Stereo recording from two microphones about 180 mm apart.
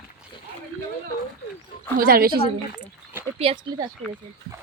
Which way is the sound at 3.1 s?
10° right (ahead or behind).